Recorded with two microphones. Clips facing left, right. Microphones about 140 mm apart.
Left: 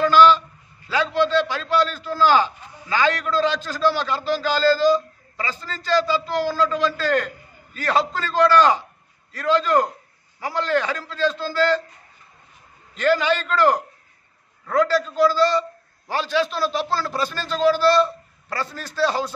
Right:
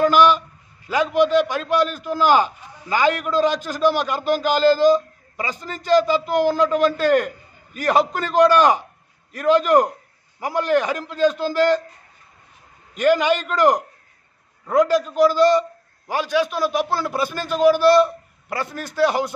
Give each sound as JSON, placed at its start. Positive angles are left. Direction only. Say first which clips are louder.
{"t": 0.0, "sound": "a sound", "louder": "even", "side_deg": -15}
{"t": 0.8, "sound": "a man's voice", "louder": "right 3 dB", "side_deg": -15}
{"t": 12.9, "sound": "a man's voice", "louder": "right 2 dB", "side_deg": -15}